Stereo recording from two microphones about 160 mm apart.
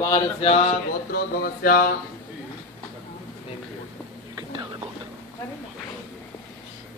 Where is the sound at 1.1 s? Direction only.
70° left (ahead or behind).